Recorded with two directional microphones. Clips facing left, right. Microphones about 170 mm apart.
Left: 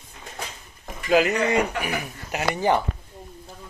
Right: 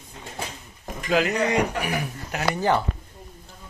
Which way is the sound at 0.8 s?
5° left (ahead or behind).